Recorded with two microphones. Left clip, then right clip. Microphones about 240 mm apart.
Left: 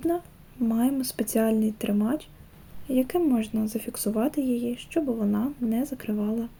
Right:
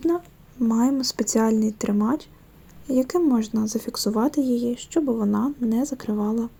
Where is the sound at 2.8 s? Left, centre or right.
Centre.